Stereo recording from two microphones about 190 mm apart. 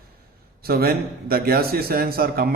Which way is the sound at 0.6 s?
55° right (ahead or behind).